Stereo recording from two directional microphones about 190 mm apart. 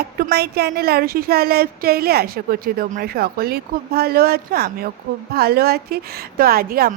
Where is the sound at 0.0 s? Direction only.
55° right (ahead or behind).